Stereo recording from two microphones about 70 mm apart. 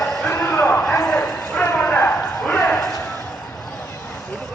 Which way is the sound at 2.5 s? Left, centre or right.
Centre.